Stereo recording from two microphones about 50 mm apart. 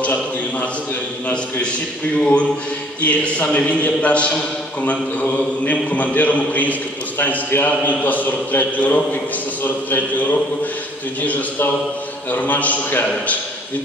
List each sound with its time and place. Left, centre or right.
0.0 s a sound: left
2.1 s a man's voice: left
5.7 s a man's voice: left
12.3 s a man's voice: left